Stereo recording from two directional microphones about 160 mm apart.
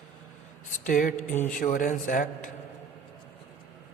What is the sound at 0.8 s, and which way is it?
Speech, 55° left (ahead or behind).